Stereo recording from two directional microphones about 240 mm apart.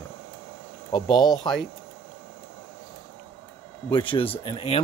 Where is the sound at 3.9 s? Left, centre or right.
Left.